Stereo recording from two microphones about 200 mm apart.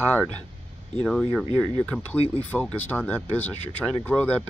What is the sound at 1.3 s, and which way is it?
Speech, 10° left (ahead or behind).